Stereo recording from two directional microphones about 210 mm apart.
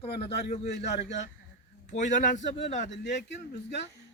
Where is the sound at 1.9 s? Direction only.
35° left (ahead or behind).